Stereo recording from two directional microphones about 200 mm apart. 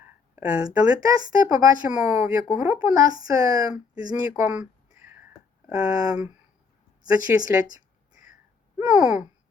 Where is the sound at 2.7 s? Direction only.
15° right (ahead or behind).